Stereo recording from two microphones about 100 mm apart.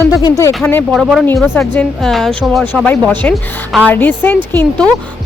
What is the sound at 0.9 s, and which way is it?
Speech, centre (ahead or behind).